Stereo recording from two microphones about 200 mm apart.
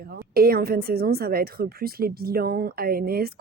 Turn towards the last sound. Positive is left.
turn(degrees=-50)  # may be behind; listen again after turning